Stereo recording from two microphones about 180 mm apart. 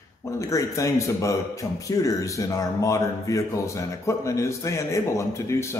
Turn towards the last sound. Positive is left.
turn(degrees=15)  # may be behind; listen again after turning